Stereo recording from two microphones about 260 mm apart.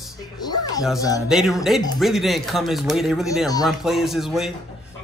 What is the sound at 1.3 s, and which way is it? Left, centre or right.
Speech, centre.